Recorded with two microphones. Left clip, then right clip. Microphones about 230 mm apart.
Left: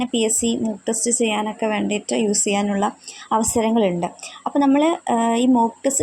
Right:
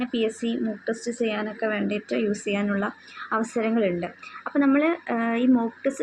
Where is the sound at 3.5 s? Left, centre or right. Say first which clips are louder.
Left 5 dB; left.